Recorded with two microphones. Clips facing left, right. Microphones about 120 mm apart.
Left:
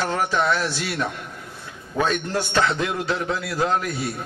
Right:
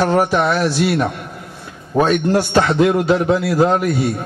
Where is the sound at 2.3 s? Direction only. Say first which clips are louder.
Right 6 dB; 40° right (ahead or behind).